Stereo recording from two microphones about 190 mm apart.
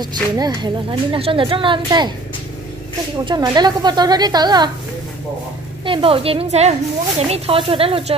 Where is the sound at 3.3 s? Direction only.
20° right (ahead or behind).